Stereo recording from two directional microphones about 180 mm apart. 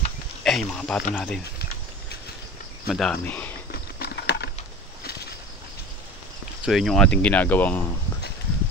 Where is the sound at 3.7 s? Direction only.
65° left (ahead or behind).